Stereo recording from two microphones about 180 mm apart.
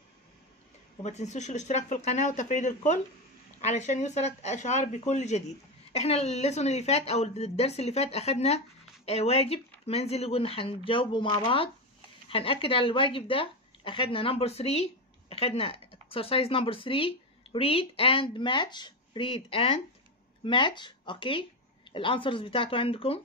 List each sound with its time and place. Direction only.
1.0 s a woman's voice: 40° left (ahead or behind)